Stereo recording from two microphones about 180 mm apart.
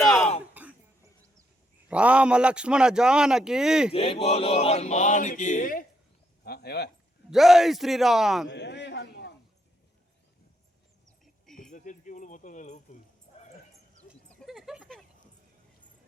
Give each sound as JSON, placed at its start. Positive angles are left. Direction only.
{"t": 0.0, "sound": "a sound", "side_deg": 0}
{"t": 0.5, "sound": "cough", "side_deg": -10}
{"t": 1.9, "sound": "speech", "side_deg": -5}
{"t": 3.9, "sound": "male singing", "side_deg": 30}
{"t": 6.4, "sound": "speech", "side_deg": 65}
{"t": 7.3, "sound": "speech", "side_deg": 0}
{"t": 8.4, "sound": "a man's voice", "side_deg": 75}
{"t": 11.7, "sound": "speech", "side_deg": 45}
{"t": 14.3, "sound": "a sound", "side_deg": 0}